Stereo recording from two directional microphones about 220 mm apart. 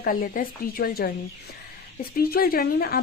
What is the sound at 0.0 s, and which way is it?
Speech, 40° left (ahead or behind).